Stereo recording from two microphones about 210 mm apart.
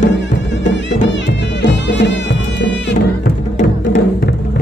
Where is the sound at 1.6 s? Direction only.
55° left (ahead or behind).